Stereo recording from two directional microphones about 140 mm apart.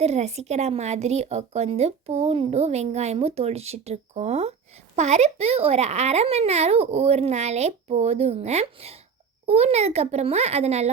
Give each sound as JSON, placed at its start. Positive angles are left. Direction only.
{"t": 0.0, "sound": "a woman's voice", "side_deg": -50}